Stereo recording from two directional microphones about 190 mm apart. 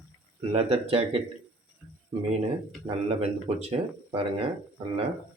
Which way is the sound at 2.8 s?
30° right (ahead or behind).